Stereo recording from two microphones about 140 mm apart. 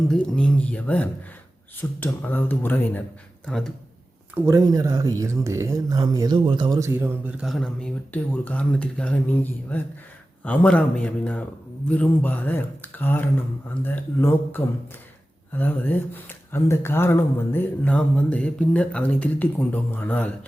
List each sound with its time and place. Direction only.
0.1 s speech: 5° left (ahead or behind)
3.4 s speech: 5° left (ahead or behind)
4.4 s speech: 20° right (ahead or behind); by 20.3 s 10° left (ahead or behind)